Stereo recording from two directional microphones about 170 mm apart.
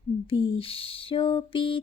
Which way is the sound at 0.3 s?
30° left (ahead or behind).